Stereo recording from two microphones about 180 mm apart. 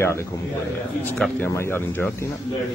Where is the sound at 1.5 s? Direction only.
15° left (ahead or behind).